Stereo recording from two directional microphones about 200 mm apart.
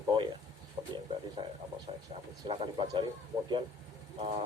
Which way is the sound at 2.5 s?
25° right (ahead or behind).